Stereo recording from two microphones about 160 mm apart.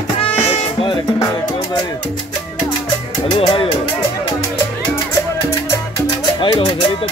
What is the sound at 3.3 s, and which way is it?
Speech, 35° left (ahead or behind).